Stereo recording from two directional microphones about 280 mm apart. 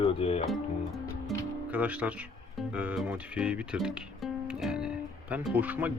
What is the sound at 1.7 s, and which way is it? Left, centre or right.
Speech, centre.